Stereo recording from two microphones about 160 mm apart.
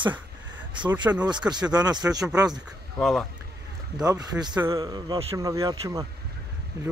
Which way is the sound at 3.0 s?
Centre (ahead or behind).